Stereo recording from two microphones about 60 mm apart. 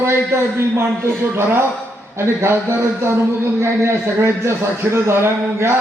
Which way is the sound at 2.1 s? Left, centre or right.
Right.